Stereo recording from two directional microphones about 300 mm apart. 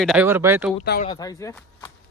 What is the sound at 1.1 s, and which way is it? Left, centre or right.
Speech, centre.